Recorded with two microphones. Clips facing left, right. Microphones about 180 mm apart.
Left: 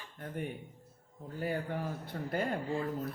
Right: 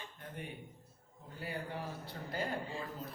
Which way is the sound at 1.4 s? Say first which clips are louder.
Left 6 dB; 50° left (ahead or behind).